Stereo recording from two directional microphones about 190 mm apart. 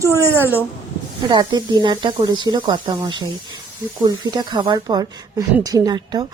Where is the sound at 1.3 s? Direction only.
25° right (ahead or behind).